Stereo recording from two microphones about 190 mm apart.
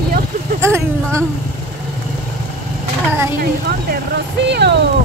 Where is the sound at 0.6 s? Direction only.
15° right (ahead or behind).